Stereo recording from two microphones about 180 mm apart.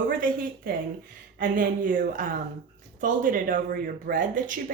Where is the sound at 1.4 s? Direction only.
50° right (ahead or behind).